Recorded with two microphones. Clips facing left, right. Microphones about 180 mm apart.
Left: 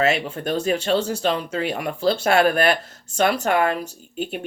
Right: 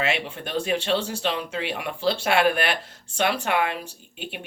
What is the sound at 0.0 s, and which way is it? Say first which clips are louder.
Speech: left 6 dB; 40° left (ahead or behind).